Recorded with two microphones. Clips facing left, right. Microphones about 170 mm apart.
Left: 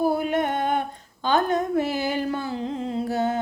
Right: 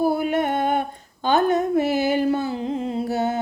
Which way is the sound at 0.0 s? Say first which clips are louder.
Right 2 dB; 10° right (ahead or behind).